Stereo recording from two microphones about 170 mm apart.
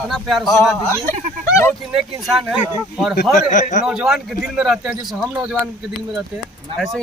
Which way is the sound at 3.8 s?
5° right (ahead or behind).